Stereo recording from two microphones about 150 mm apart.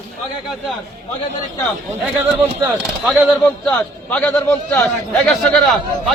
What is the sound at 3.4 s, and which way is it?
A man's voice, 5° left (ahead or behind).